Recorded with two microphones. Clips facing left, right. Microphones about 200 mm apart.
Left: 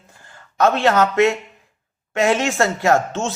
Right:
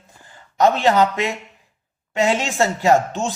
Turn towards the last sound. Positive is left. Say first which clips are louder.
# right 1 dB
turn(degrees=-15)  # may be behind; listen again after turning